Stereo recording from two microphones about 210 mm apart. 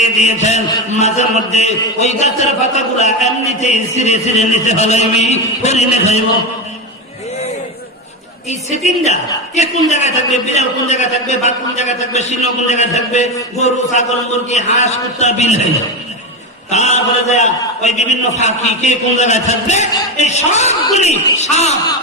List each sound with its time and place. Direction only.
0.0 s a man's voice: 30° left (ahead or behind)
8.4 s a man's voice: 30° left (ahead or behind)
16.7 s a man's voice: 30° left (ahead or behind)